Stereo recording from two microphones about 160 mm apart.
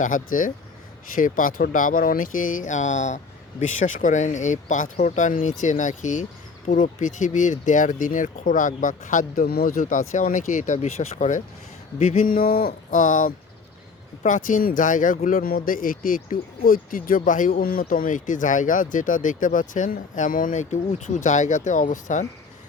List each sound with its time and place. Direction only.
0.0 s speech: 55° left (ahead or behind)
12.3 s speech: 65° left (ahead or behind); by 22.3 s 50° left (ahead or behind)